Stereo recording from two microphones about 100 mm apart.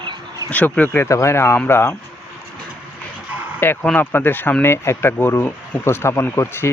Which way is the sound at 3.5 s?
20° left (ahead or behind).